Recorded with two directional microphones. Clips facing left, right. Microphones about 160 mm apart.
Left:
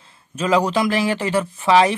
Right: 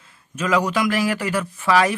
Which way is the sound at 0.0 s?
30° left (ahead or behind).